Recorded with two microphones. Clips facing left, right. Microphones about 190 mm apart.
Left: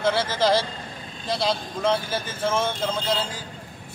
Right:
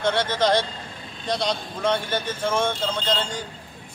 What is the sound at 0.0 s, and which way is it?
A man's voice, 5° left (ahead or behind).